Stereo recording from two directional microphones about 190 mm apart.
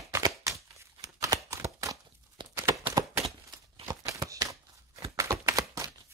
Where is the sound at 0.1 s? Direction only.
15° right (ahead or behind).